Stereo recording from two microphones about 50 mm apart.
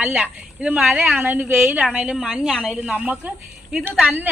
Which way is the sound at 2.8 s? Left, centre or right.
Right.